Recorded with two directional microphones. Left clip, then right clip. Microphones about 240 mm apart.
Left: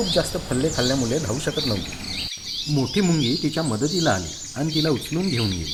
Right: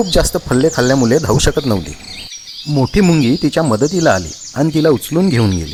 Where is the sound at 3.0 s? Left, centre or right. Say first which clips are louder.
Right 10 dB; right.